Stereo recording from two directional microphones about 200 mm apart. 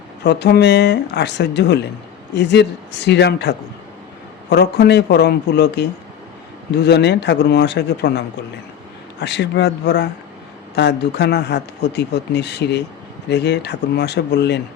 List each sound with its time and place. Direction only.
0.3 s speech: 55° left (ahead or behind)
9.2 s speech: 60° left (ahead or behind)